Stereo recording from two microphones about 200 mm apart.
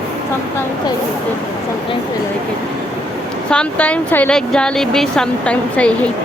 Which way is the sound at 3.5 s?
5° left (ahead or behind).